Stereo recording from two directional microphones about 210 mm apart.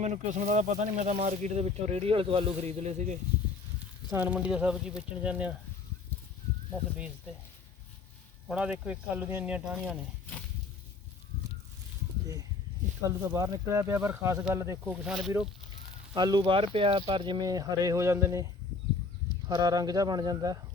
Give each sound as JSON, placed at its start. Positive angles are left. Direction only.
{"t": 0.0, "sound": "speech", "side_deg": -35}
{"t": 4.1, "sound": "speech", "side_deg": -10}
{"t": 8.4, "sound": "speech", "side_deg": -5}
{"t": 13.0, "sound": "speech", "side_deg": -15}
{"t": 16.1, "sound": "speech", "side_deg": -20}
{"t": 19.5, "sound": "speech", "side_deg": -20}